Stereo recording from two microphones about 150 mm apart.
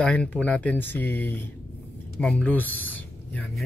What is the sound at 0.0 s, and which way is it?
Speech, 10° left (ahead or behind).